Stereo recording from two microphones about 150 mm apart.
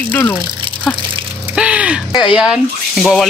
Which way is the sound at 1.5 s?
10° right (ahead or behind).